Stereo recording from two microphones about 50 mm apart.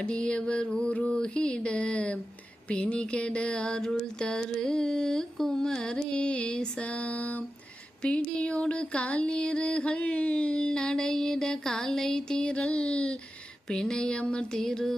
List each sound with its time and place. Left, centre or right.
0.0 s music: centre
4.4 s carnatic music: centre
8.0 s music: left
13.7 s carnatic music: centre